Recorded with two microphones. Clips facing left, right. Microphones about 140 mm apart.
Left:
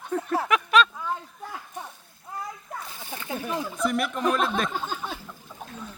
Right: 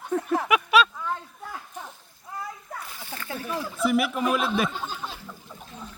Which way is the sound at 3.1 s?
20° left (ahead or behind).